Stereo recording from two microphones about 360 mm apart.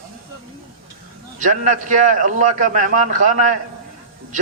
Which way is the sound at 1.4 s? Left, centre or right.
Right.